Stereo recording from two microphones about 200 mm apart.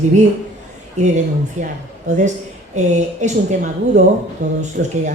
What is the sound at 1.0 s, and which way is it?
Speech, 35° right (ahead or behind).